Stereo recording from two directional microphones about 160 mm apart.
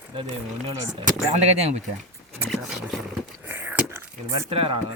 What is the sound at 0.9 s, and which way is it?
Speech, 40° right (ahead or behind).